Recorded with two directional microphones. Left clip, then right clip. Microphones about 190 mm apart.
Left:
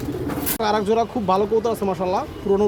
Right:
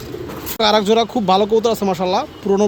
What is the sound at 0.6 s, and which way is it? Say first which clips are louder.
Speech: right 6 dB; 55° right (ahead or behind).